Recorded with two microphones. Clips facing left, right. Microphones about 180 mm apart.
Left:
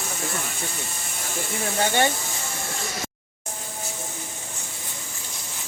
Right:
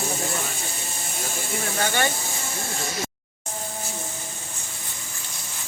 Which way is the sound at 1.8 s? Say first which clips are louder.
Left 3 dB; 25° left (ahead or behind).